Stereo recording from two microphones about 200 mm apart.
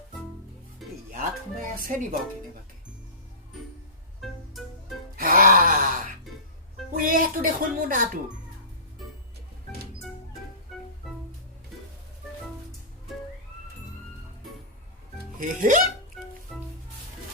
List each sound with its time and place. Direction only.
1.1 s music: 45° right (ahead or behind)
4.2 s music: centre (ahead or behind)
5.1 s gasp: 45° right (ahead or behind)
7.0 s speech: 45° right (ahead or behind)
15.4 s speech: 40° right (ahead or behind)
16.5 s music: centre (ahead or behind)